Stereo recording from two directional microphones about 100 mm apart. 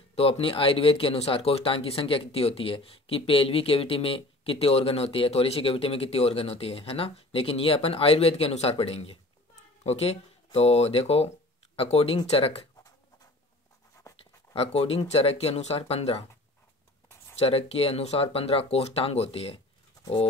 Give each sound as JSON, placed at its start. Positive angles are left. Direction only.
{"t": 0.1, "sound": "speech", "side_deg": 80}
{"t": 14.5, "sound": "speech", "side_deg": 75}
{"t": 15.0, "sound": "speech", "side_deg": 90}
{"t": 17.4, "sound": "speech", "side_deg": 85}